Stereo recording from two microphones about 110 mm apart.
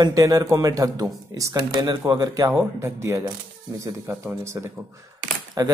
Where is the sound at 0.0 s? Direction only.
35° right (ahead or behind).